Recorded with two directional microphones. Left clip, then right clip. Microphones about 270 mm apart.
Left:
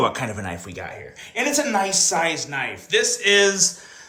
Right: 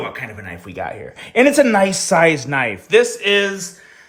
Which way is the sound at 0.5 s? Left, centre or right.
Centre.